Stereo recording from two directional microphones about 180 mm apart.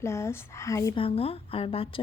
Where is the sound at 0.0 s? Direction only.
15° left (ahead or behind).